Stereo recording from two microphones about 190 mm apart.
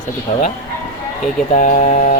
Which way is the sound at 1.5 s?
40° left (ahead or behind).